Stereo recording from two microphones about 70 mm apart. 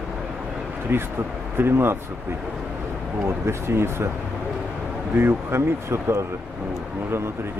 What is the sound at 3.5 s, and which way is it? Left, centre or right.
Speech, right.